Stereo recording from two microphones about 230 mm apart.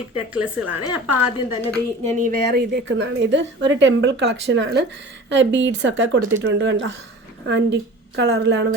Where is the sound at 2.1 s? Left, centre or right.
Right.